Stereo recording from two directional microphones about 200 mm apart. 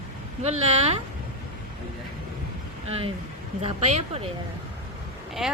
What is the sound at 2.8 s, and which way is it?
Speech, 30° right (ahead or behind).